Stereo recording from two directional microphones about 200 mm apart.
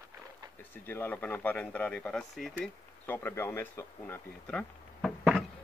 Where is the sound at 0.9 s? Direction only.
10° left (ahead or behind).